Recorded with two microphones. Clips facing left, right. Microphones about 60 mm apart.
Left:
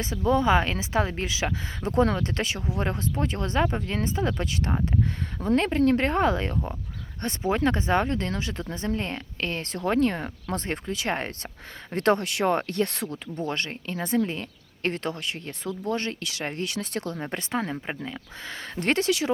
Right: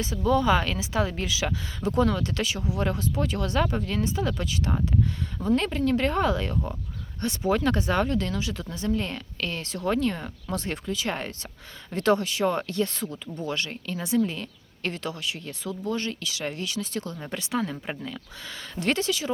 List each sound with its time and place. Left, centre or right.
0.3 s speech: left
17.8 s speech: left
18.4 s speech: left